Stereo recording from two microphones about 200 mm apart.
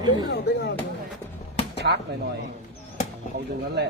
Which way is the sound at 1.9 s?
55° right (ahead or behind).